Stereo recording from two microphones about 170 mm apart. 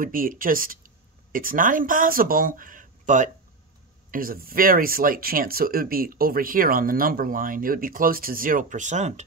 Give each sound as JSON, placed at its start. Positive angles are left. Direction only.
{"t": 0.0, "sound": "speech", "side_deg": -55}